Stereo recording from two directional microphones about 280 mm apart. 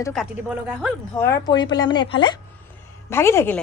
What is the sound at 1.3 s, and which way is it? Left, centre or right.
Speech, centre.